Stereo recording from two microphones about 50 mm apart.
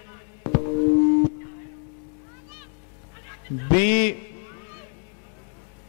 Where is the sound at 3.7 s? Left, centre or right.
Centre.